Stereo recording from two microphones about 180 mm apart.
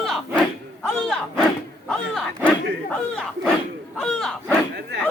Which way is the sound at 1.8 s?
5° left (ahead or behind).